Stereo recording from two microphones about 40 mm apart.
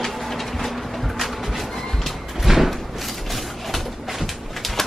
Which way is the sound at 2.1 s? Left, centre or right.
Centre.